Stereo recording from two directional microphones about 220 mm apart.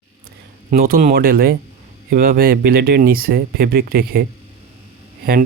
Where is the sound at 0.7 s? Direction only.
40° right (ahead or behind).